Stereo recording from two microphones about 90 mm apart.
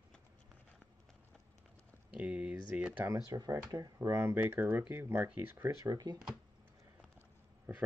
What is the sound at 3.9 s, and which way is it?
Speech, 30° right (ahead or behind).